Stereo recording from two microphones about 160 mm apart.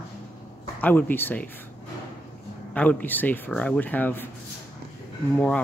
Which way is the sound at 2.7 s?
10° left (ahead or behind).